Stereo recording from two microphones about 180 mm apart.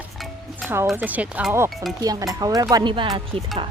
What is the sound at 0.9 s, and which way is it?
Speech, 10° right (ahead or behind).